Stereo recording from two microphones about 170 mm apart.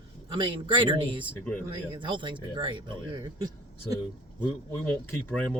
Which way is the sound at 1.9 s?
30° right (ahead or behind).